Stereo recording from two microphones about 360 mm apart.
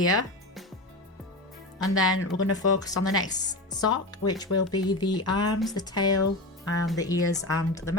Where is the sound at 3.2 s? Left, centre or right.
Centre.